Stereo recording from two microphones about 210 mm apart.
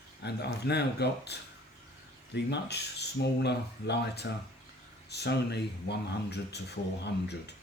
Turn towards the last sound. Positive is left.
turn(degrees=55)  # may be behind; listen again after turning